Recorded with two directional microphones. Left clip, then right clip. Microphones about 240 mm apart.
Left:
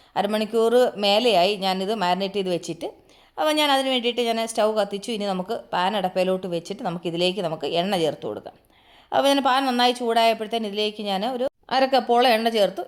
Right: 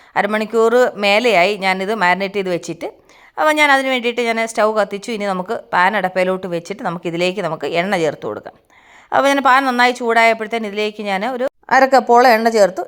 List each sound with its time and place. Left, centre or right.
0.1 s speech: centre
12.5 s a woman's voice: right